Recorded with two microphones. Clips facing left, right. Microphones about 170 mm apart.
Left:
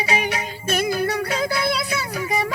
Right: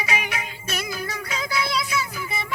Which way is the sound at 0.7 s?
60° left (ahead or behind).